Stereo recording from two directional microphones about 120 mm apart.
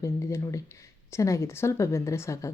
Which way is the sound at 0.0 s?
25° left (ahead or behind).